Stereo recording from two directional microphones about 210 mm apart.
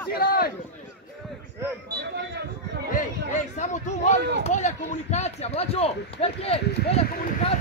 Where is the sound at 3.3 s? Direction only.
35° left (ahead or behind).